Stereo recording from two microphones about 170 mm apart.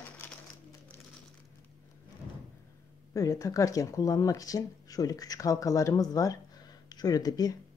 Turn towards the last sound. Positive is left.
turn(degrees=20)  # may be behind; listen again after turning